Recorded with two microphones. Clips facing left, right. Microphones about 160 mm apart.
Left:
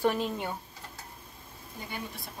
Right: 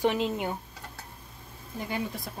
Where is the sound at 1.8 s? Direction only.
90° right.